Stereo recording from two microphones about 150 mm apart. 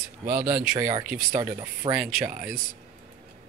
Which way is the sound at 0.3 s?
80° right.